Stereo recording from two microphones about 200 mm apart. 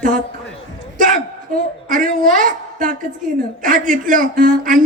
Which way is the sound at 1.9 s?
40° right (ahead or behind).